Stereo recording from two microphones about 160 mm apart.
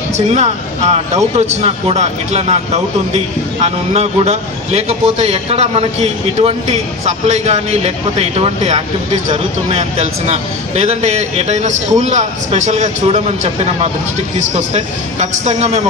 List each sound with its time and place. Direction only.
0.1 s a man's voice: 45° right (ahead or behind)